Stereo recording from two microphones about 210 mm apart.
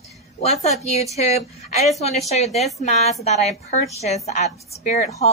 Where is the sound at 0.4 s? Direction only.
30° left (ahead or behind).